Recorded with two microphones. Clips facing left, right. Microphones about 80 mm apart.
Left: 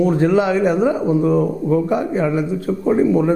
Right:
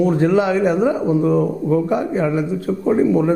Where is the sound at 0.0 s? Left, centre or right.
Left.